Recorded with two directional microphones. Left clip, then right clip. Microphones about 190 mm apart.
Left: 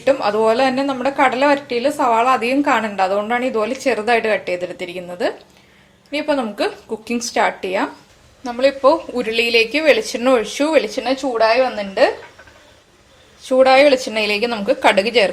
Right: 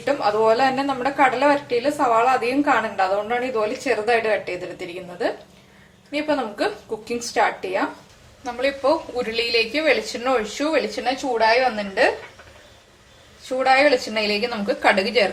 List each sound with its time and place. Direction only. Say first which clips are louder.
0.0 s a woman's voice: left 3 dB; 40° left (ahead or behind)
13.6 s a woman's voice: left 5 dB; 45° left (ahead or behind)